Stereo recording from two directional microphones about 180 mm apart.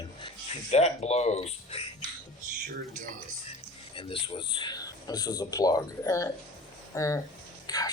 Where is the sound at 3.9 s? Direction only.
30° left (ahead or behind).